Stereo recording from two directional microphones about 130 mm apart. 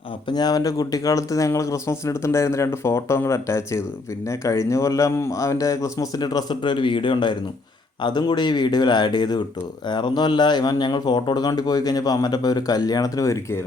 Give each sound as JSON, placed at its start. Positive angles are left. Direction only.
{"t": 0.3, "sound": "speech", "side_deg": 30}